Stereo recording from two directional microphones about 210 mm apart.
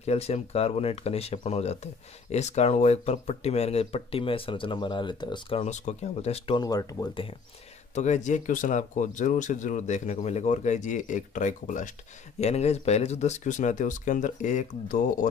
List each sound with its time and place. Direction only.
0.0 s speech: 30° left (ahead or behind)
7.9 s speech: 35° left (ahead or behind)